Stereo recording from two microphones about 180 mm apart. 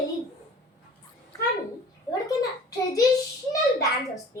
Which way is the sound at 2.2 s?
20° left (ahead or behind).